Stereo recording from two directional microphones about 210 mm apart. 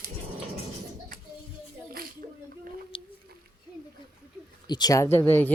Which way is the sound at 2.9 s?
25° left (ahead or behind).